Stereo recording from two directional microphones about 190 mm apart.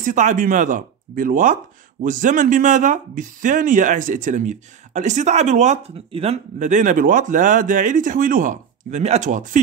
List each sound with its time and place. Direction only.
0.0 s speech: 40° right (ahead or behind)